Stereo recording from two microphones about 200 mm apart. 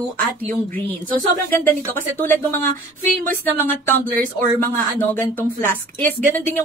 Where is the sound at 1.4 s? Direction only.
10° left (ahead or behind).